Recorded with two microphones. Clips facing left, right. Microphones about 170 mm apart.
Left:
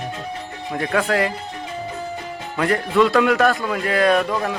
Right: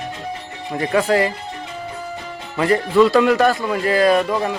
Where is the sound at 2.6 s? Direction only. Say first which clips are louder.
Right 3 dB; centre (ahead or behind).